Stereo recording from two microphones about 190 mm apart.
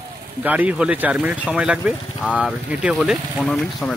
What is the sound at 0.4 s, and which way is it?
Speech, 10° right (ahead or behind).